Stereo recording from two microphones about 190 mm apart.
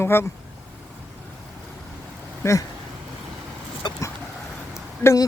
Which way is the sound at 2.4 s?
15° left (ahead or behind).